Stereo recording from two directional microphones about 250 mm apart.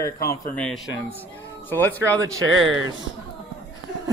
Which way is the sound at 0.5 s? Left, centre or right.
Centre.